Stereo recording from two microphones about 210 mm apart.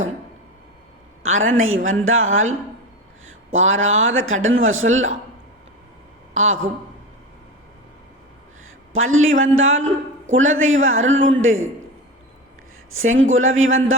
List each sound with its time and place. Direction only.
1.2 s a man's voice: 70° right (ahead or behind)
6.3 s speech: 70° right (ahead or behind)
8.9 s a man's voice: 75° right (ahead or behind)
12.9 s a man's voice: 75° right (ahead or behind)